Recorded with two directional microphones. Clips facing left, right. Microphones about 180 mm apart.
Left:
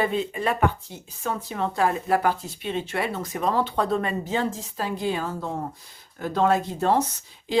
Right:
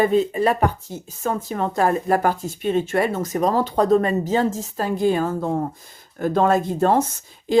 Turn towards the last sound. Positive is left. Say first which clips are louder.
# right 6 dB
turn(degrees=-45)  # may be behind; listen again after turning